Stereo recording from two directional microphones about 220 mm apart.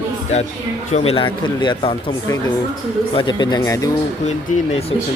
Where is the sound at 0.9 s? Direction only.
25° left (ahead or behind).